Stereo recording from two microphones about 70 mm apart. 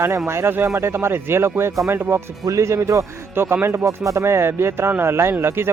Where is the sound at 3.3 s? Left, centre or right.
Right.